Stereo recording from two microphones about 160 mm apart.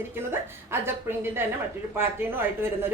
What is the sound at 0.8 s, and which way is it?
Speech, 15° right (ahead or behind).